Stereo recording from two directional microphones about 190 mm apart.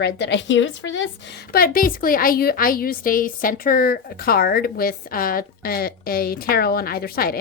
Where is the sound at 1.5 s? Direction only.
50° left (ahead or behind).